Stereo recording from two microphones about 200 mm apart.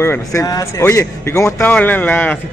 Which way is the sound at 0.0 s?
15° left (ahead or behind).